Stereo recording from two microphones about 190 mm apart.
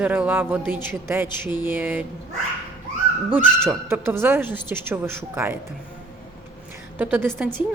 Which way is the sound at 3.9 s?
10° right (ahead or behind).